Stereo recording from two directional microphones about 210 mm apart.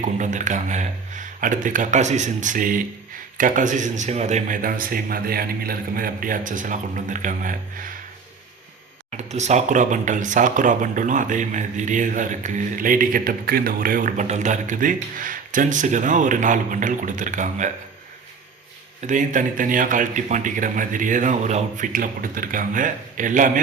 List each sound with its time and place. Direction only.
0.2 s speech: 35° right (ahead or behind)
9.0 s speech: 35° right (ahead or behind)
19.0 s speech: 40° right (ahead or behind)